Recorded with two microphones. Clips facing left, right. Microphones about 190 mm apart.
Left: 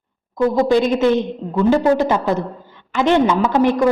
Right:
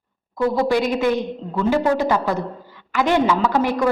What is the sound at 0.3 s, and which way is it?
A woman's voice, 20° left (ahead or behind).